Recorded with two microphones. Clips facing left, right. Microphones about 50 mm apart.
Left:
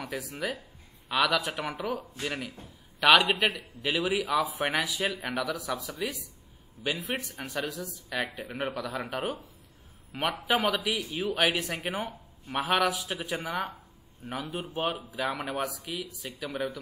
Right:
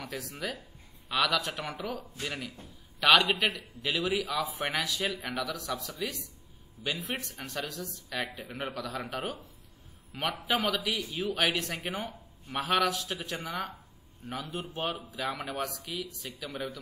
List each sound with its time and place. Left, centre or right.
0.0 s speech: centre
2.0 s a man's voice: centre